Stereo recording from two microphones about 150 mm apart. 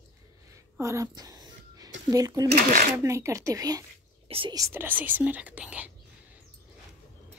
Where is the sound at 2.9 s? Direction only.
20° right (ahead or behind).